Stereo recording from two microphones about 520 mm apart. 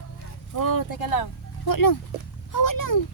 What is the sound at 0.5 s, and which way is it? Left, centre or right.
Speech, left.